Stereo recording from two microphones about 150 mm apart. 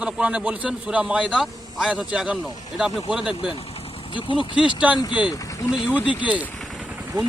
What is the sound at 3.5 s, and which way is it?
Speech, 40° left (ahead or behind).